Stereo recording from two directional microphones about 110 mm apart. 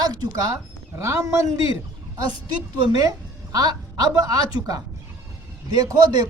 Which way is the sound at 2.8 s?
35° right (ahead or behind).